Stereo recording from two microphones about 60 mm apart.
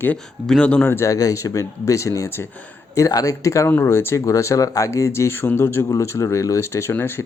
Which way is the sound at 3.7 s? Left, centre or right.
Left.